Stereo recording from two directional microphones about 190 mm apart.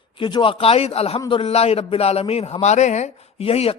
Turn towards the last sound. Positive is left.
turn(degrees=30)  # may be behind; listen again after turning